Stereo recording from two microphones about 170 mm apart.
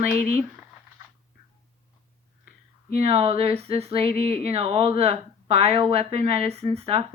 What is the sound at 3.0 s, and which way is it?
Speech, 35° right (ahead or behind).